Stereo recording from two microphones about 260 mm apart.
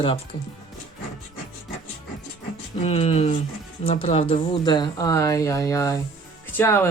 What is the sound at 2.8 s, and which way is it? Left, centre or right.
Speech, left.